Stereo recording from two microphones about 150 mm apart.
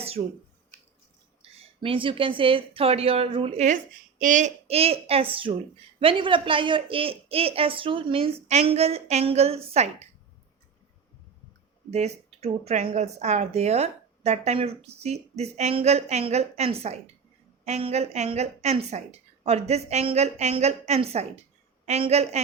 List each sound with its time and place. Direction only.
0.2 s speech: 45° right (ahead or behind)
1.4 s speech: 35° right (ahead or behind)
4.2 s a woman's voice: 55° right (ahead or behind)
11.9 s speech: 45° right (ahead or behind)